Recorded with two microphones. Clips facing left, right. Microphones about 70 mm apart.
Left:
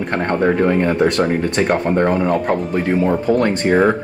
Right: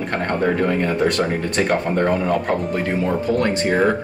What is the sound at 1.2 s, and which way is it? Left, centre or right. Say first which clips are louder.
Speech: left 3 dB; centre.